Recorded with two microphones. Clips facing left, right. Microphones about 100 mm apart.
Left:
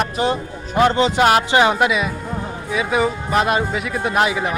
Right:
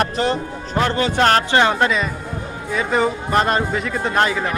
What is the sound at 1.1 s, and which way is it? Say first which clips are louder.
Speech: right 2 dB; 10° left (ahead or behind).